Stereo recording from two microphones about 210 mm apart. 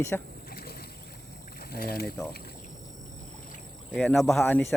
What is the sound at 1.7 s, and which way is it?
Speech, 45° left (ahead or behind).